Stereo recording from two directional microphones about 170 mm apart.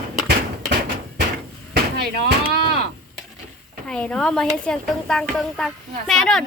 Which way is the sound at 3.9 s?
5° left (ahead or behind).